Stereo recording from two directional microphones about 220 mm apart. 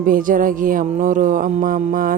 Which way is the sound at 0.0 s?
40° right (ahead or behind).